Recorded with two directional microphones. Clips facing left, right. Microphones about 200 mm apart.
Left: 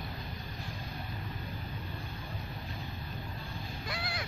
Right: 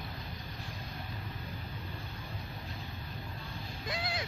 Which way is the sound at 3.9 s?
20° right (ahead or behind).